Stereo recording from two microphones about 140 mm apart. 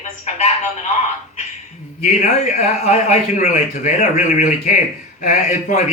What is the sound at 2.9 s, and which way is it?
A man's voice, 55° left (ahead or behind).